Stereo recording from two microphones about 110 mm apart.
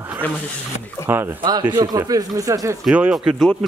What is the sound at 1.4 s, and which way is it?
Speech, 45° right (ahead or behind).